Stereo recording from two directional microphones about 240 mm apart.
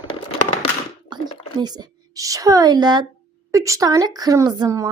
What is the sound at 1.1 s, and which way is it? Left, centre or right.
A woman's voice, centre.